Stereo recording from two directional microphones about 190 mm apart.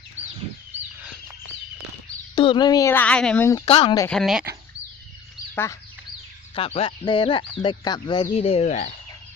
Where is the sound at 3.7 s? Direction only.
30° left (ahead or behind).